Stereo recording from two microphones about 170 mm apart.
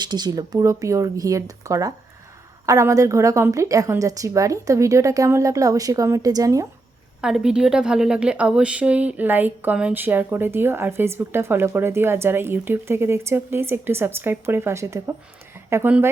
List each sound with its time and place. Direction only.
0.0 s a woman's voice: 25° right (ahead or behind)
7.2 s a woman's voice: 5° right (ahead or behind)